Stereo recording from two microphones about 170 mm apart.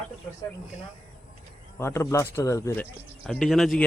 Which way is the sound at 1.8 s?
15° left (ahead or behind).